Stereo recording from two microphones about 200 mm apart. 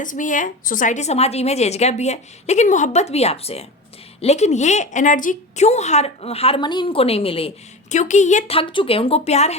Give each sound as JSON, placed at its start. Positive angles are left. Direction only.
{"t": 0.0, "sound": "a woman's voice", "side_deg": 40}